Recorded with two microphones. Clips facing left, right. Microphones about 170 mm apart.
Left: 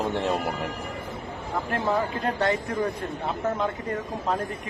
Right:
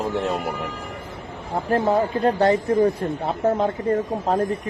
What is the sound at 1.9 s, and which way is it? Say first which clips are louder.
Speech: right 6 dB; 30° right (ahead or behind).